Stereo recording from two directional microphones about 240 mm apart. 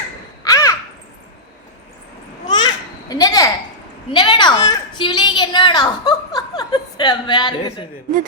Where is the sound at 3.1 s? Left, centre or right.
Centre.